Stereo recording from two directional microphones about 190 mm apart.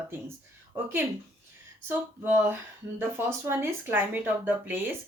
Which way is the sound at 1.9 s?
10° right (ahead or behind).